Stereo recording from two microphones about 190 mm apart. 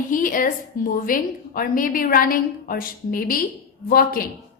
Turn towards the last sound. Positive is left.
turn(degrees=50)  # may be behind; listen again after turning